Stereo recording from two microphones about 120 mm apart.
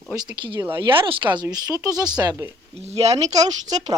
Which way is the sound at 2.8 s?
65° right (ahead or behind).